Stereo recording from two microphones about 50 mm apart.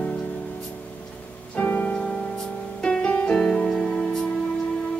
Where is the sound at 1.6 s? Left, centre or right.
Left.